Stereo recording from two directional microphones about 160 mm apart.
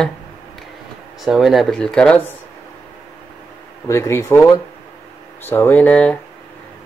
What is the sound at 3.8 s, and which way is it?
A man's voice, 15° left (ahead or behind).